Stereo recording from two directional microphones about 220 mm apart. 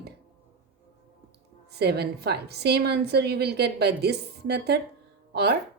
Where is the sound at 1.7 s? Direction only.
45° right (ahead or behind).